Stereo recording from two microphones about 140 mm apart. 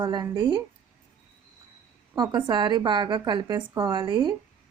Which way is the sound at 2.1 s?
30° right (ahead or behind).